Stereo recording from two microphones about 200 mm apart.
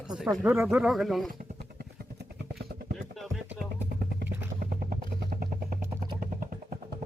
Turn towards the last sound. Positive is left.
turn(degrees=-45)  # may be behind; listen again after turning